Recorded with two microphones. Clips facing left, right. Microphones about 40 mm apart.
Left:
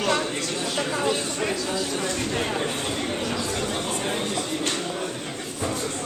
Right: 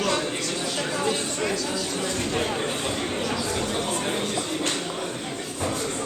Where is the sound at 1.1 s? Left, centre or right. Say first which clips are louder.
Even; centre.